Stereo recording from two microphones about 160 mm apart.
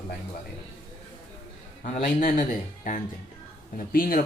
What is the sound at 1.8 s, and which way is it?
Speech, 50° left (ahead or behind).